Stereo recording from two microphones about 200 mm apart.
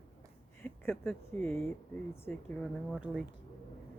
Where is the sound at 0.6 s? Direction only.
5° left (ahead or behind).